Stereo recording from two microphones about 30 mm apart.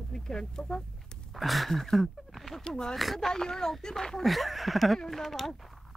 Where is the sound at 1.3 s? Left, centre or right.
Centre.